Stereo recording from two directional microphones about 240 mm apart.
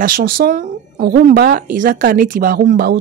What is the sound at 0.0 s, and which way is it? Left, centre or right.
Speech, right.